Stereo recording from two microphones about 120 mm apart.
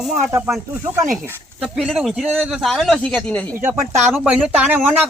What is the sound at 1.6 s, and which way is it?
Speech, centre (ahead or behind).